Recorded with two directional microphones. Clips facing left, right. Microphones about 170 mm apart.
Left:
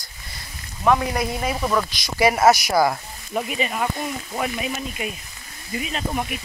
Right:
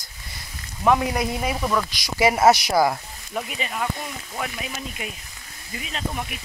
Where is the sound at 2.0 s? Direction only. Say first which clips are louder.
Even; 20° right (ahead or behind).